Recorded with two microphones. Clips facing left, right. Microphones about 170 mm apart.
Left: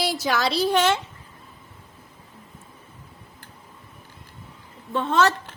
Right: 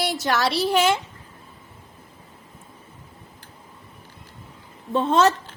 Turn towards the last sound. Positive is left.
turn(degrees=-20)  # may be behind; listen again after turning